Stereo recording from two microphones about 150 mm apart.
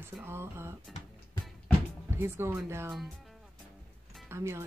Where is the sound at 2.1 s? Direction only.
15° right (ahead or behind).